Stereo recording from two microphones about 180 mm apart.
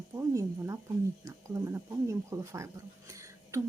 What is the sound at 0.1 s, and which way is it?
Speech, 15° right (ahead or behind).